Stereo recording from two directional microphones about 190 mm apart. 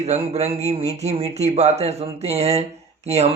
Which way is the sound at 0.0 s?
35° right (ahead or behind).